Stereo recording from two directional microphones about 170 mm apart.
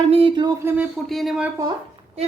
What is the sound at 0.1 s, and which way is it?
Speech, 30° right (ahead or behind).